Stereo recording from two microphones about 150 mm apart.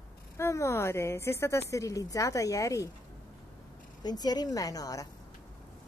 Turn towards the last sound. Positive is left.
turn(degrees=25)  # may be behind; listen again after turning